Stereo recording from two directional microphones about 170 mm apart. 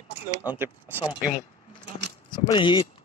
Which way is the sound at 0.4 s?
10° right (ahead or behind).